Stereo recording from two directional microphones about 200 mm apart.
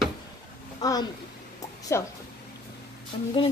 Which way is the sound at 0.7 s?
20° left (ahead or behind).